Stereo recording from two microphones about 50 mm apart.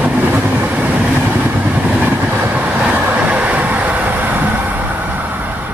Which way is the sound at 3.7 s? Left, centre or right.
Right.